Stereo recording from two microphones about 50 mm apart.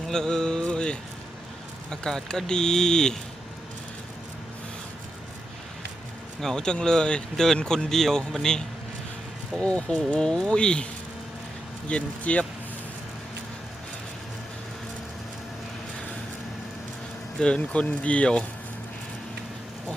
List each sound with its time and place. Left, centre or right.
0.1 s speech: centre
6.4 s speech: centre
9.6 s speech: left
11.9 s speech: left
17.4 s speech: left